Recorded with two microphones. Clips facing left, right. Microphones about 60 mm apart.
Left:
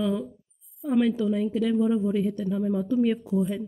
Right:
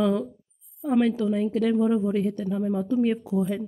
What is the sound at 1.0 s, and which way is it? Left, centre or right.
Speech, right.